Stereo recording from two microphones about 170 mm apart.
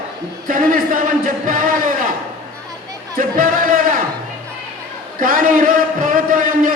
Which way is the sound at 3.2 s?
55° right (ahead or behind).